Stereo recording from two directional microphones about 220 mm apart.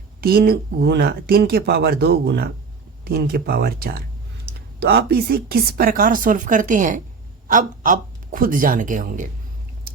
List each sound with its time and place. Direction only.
0.2 s speech: 45° right (ahead or behind)